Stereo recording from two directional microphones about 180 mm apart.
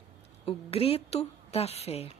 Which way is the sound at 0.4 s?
35° left (ahead or behind).